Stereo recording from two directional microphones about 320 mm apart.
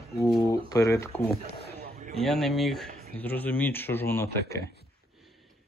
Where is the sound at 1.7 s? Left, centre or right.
Right.